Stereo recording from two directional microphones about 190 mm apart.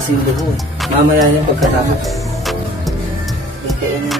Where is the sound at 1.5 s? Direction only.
Centre (ahead or behind).